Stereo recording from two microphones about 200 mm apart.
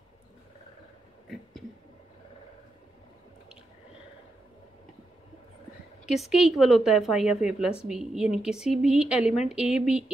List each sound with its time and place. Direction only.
6.1 s a woman's voice: centre (ahead or behind)